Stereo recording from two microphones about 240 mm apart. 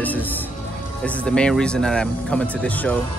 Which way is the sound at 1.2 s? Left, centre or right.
Centre.